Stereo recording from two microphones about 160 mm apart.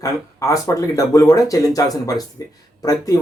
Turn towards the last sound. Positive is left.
turn(degrees=20)  # may be behind; listen again after turning